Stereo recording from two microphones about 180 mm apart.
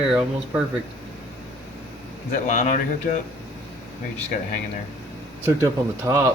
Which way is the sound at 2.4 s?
45° left (ahead or behind).